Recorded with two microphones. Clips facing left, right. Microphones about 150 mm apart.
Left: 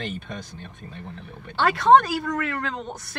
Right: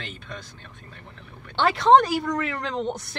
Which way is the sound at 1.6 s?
25° right (ahead or behind).